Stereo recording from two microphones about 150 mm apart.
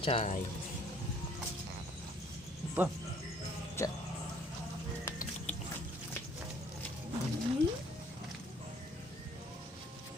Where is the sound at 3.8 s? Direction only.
15° left (ahead or behind).